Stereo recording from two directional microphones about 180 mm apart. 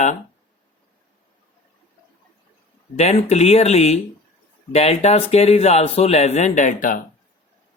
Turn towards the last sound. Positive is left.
turn(degrees=45)  # may be behind; listen again after turning